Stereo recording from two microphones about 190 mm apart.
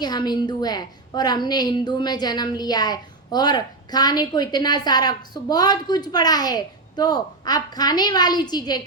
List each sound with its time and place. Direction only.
0.0 s a woman's voice: 20° left (ahead or behind)